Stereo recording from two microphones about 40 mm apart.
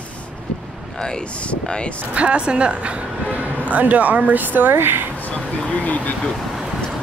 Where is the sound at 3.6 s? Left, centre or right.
Right.